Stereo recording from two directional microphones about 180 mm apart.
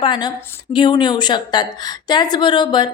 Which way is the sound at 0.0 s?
25° left (ahead or behind).